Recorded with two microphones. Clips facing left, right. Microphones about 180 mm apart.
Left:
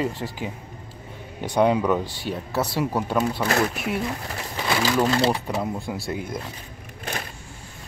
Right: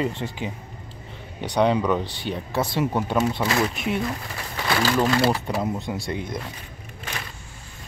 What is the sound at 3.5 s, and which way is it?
Speech, 50° left (ahead or behind).